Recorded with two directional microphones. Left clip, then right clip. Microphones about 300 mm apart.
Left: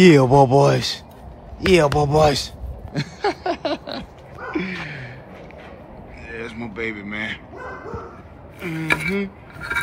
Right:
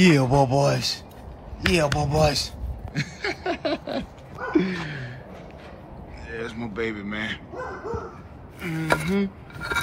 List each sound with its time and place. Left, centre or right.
0.0 s speech: left
2.9 s a sound: centre
6.2 s a man's voice: centre
8.5 s a man's voice: centre